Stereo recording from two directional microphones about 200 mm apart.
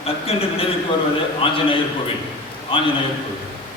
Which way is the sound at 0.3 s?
30° left (ahead or behind).